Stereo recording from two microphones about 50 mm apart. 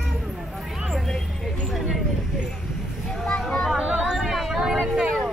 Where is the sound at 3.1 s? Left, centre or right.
Centre.